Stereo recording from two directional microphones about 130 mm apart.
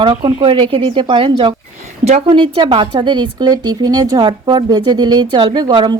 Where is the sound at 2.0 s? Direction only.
55° right (ahead or behind).